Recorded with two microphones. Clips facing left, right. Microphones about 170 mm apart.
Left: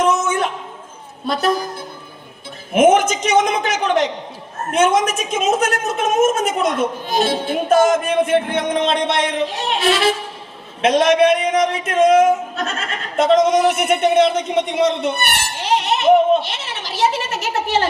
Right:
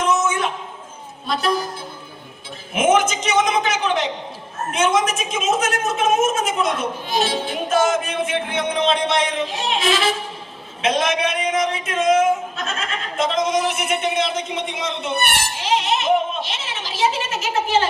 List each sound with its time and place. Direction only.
0.0 s a sound: 50° left (ahead or behind)
1.3 s a woman's voice: 50° left (ahead or behind)
2.7 s a woman's voice: 50° left (ahead or behind)
12.2 s a woman's voice: 45° left (ahead or behind)
15.7 s music: 50° left (ahead or behind)
16.5 s a sound: 45° left (ahead or behind)